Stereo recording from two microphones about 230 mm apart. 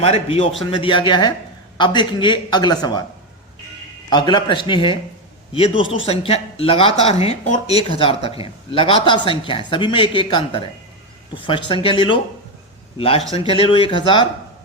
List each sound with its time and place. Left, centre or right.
0.0 s speech: left
4.1 s speech: centre